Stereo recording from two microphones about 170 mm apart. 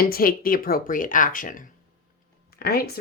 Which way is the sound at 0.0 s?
60° left (ahead or behind).